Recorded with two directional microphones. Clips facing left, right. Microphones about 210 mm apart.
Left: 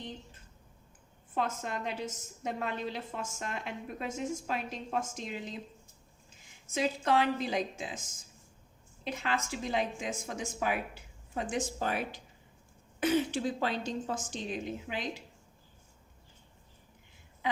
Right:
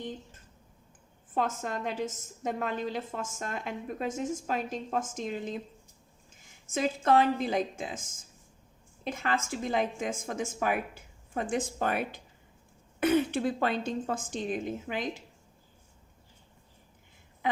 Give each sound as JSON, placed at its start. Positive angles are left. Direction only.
{"t": 1.4, "sound": "a woman's voice", "side_deg": -45}
{"t": 6.7, "sound": "a woman's voice", "side_deg": -50}